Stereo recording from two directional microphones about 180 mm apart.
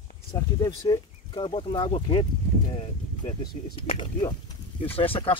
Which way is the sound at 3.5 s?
35° left (ahead or behind).